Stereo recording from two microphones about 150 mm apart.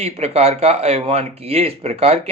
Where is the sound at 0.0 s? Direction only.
45° right (ahead or behind).